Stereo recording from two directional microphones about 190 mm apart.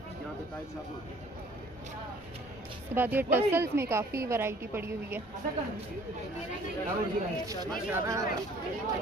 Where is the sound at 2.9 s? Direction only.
10° right (ahead or behind).